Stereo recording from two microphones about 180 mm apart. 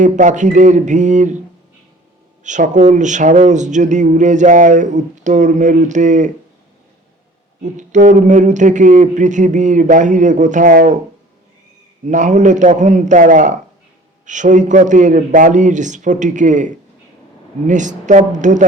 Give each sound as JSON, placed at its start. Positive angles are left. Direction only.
{"t": 0.0, "sound": "speech", "side_deg": -45}
{"t": 2.4, "sound": "speech", "side_deg": -40}
{"t": 7.6, "sound": "speech", "side_deg": -45}
{"t": 12.0, "sound": "speech", "side_deg": -45}